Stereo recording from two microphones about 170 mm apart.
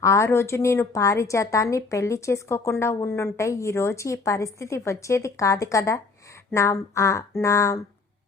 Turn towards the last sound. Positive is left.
turn(degrees=15)  # may be behind; listen again after turning